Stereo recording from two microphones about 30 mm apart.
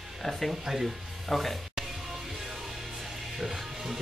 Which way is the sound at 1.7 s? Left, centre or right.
Centre.